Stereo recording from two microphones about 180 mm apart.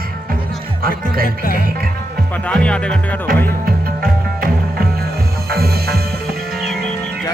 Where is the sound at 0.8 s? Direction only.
55° right (ahead or behind).